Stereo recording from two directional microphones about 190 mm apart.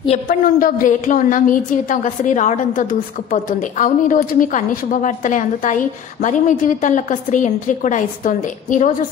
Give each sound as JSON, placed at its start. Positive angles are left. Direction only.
{"t": 0.3, "sound": "a woman's voice", "side_deg": 45}